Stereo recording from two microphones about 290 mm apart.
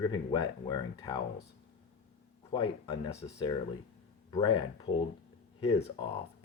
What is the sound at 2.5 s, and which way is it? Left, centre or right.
Speech, centre.